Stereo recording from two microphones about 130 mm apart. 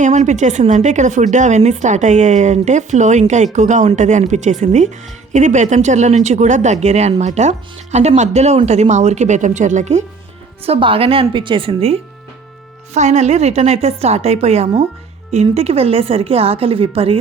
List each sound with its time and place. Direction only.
0.0 s a woman's voice: 65° right (ahead or behind)
10.7 s a woman's voice: 45° right (ahead or behind)
12.9 s a woman's voice: 60° right (ahead or behind)